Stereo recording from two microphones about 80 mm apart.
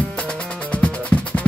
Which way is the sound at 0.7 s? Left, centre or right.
Centre.